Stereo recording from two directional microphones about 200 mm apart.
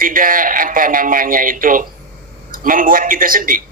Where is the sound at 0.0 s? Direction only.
45° right (ahead or behind).